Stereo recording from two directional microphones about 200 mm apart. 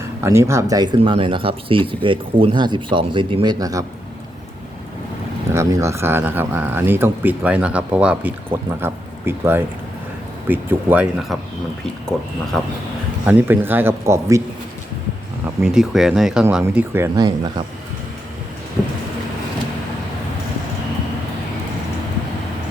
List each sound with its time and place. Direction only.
0.2 s speech: 15° right (ahead or behind)
5.5 s speech: 15° right (ahead or behind)
12.5 s speech: centre (ahead or behind)
13.2 s speech: 10° right (ahead or behind)
15.6 s speech: centre (ahead or behind); by 17.5 s 20° right (ahead or behind)